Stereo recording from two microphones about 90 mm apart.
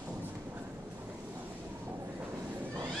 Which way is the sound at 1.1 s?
20° right (ahead or behind).